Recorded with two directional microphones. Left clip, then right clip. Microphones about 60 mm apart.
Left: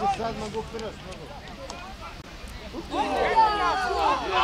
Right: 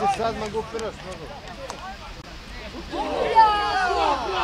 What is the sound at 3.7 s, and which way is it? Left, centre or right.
Speech, right.